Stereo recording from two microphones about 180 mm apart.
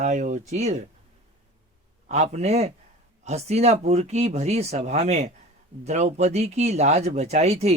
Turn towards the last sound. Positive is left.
turn(degrees=-35)  # may be behind; listen again after turning